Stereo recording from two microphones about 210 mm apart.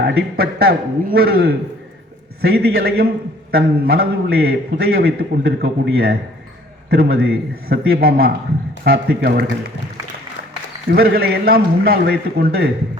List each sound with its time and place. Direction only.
0.0 s a man's voice: 45° right (ahead or behind)
10.9 s a man's voice: 50° right (ahead or behind)